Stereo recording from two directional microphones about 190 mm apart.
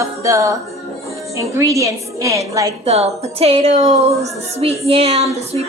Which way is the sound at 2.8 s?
35° right (ahead or behind).